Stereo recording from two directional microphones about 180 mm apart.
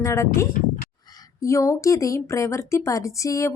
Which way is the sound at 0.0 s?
15° left (ahead or behind).